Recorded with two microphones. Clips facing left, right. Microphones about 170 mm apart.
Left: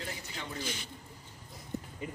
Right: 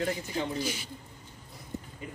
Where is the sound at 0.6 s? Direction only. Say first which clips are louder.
Right 6 dB; 10° right (ahead or behind).